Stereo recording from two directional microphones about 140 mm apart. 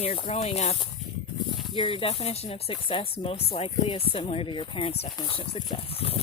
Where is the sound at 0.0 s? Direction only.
45° left (ahead or behind).